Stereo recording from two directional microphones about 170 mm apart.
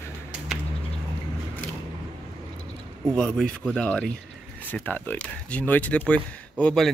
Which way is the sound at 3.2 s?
5° left (ahead or behind).